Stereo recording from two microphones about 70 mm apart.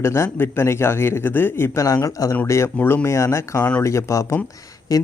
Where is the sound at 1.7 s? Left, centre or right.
Left.